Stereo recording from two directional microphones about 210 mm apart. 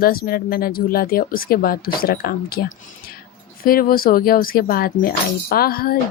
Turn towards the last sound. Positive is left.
turn(degrees=45)  # may be behind; listen again after turning